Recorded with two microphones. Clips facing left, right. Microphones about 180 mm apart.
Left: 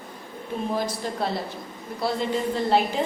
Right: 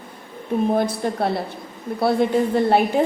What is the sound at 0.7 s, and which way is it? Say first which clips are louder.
A woman's voice: right 4 dB; 55° right (ahead or behind).